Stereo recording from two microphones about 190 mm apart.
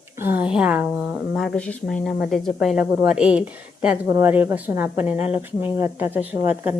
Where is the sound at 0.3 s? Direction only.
5° right (ahead or behind).